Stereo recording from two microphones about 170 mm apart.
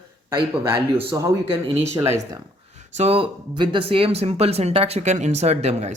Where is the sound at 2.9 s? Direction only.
35° right (ahead or behind).